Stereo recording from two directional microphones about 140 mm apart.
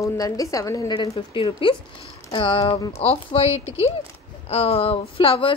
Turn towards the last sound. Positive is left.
turn(degrees=40)  # may be behind; listen again after turning